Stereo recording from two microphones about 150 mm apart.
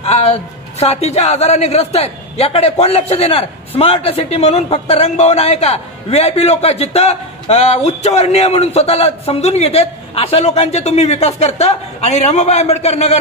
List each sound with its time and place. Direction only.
0.0 s a woman's voice: 45° left (ahead or behind)